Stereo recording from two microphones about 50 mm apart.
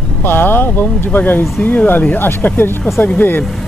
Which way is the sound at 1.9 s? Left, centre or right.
Left.